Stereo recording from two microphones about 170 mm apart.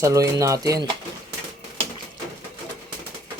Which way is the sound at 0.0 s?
20° right (ahead or behind).